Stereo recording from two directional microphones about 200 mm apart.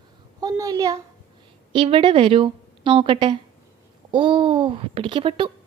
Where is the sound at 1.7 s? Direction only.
25° right (ahead or behind).